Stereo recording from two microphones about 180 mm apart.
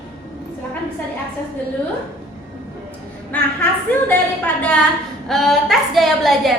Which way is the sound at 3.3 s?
10° left (ahead or behind).